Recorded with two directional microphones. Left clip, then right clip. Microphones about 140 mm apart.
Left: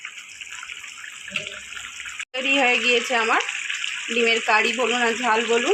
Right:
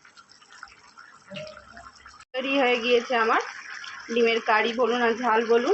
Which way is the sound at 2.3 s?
10° left (ahead or behind).